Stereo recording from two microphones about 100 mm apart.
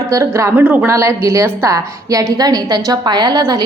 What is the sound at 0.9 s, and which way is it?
A woman's voice, 30° right (ahead or behind).